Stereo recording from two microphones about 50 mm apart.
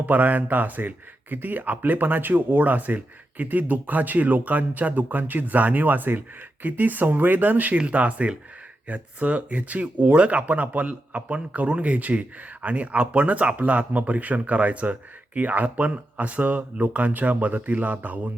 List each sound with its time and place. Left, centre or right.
0.0 s speech: right
7.8 s speech: right